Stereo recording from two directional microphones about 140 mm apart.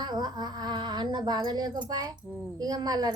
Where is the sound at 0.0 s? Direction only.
30° right (ahead or behind).